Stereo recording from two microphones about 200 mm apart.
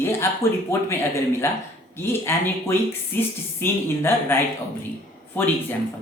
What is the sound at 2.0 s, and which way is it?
A woman's voice, 10° left (ahead or behind).